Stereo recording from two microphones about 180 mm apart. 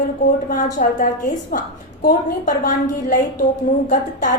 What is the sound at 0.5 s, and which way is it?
A woman's voice, 45° left (ahead or behind).